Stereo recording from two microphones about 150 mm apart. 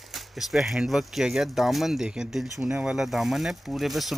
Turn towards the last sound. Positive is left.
turn(degrees=0)  # may be behind; listen again after turning